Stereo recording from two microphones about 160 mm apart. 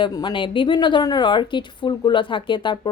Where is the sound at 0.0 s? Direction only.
25° left (ahead or behind).